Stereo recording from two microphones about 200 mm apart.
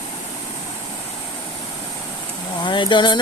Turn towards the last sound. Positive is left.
turn(degrees=25)  # may be behind; listen again after turning